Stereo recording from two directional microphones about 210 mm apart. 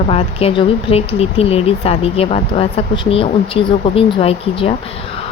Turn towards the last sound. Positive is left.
turn(degrees=30)  # may be behind; listen again after turning